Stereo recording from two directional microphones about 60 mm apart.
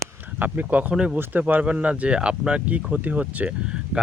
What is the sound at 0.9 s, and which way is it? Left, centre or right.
Speech, centre.